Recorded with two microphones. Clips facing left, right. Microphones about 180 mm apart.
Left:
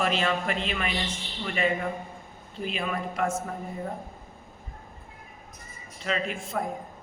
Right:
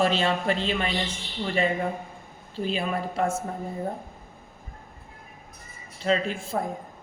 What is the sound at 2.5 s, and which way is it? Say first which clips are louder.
Speech: right 3 dB; 30° right (ahead or behind).